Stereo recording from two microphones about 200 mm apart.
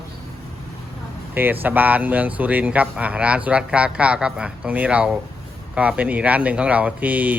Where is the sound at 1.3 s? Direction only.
10° right (ahead or behind).